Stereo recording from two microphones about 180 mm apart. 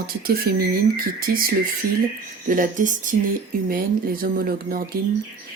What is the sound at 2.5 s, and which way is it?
Speech, 45° right (ahead or behind).